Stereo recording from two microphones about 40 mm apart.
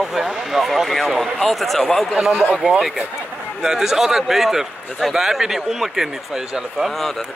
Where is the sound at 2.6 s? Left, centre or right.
Right.